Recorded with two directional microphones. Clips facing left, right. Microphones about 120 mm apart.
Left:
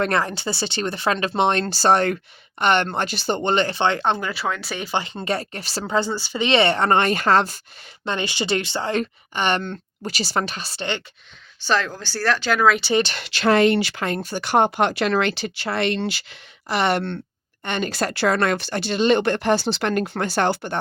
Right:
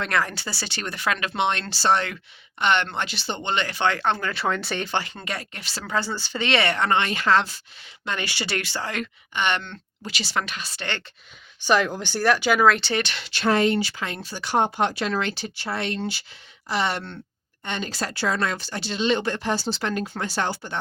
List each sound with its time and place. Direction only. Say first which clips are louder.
0.1 s speech: left 3 dB; 25° left (ahead or behind)
4.4 s speech: right 1 dB; centre (ahead or behind)
4.9 s speech: left 4 dB; 25° left (ahead or behind)
5.8 s speech: left 4 dB; 20° left (ahead or behind)
6.5 s speech: left 4 dB; 25° left (ahead or behind); by 7.6 s 45° left (ahead or behind)
8.0 s speech: left 5 dB; 25° left (ahead or behind)
11.6 s speech: right 1 dB; 15° right (ahead or behind); by 12.9 s centre (ahead or behind)
12.9 s speech: left 6 dB; 30° left (ahead or behind)
13.2 s speech: left 3 dB; 85° left
14.0 s speech: left 6 dB; 50° left (ahead or behind)